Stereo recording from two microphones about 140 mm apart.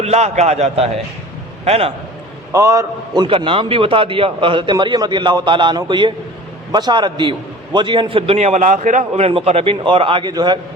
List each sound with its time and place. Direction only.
0.0 s a man's voice: 50° right (ahead or behind)
2.5 s a man's voice: 25° right (ahead or behind)
3.2 s a man's voice: 40° right (ahead or behind); by 9.0 s 65° right (ahead or behind)
9.1 s a man's voice: 45° right (ahead or behind)